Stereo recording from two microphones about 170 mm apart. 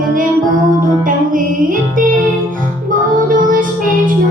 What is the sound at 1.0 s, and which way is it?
Music, 55° right (ahead or behind).